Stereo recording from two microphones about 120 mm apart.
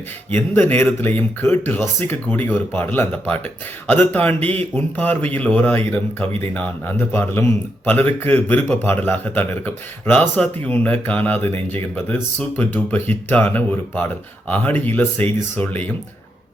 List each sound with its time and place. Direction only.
0.3 s a man's voice: 15° left (ahead or behind)